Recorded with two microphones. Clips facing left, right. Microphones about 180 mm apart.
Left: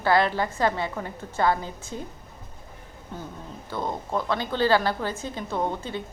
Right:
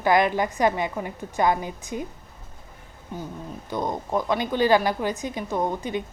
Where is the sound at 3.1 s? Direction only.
15° right (ahead or behind).